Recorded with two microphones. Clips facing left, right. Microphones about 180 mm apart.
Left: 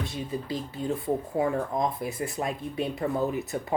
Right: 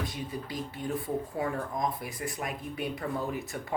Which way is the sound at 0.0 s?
25° left (ahead or behind).